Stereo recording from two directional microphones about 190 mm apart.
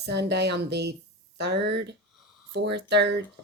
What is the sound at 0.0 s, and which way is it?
Speech, 60° right (ahead or behind).